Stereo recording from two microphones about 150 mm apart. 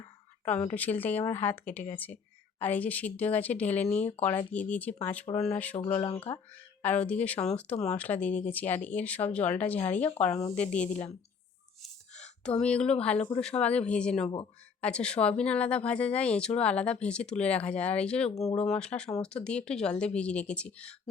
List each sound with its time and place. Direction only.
0.7 s speech: 10° left (ahead or behind)
5.9 s speech: 25° left (ahead or behind)
6.8 s speech: 10° left (ahead or behind)
11.8 s a sound: 5° left (ahead or behind)
13.0 s speech: 10° left (ahead or behind)